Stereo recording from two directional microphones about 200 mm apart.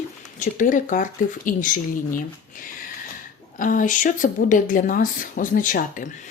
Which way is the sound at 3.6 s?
40° left (ahead or behind).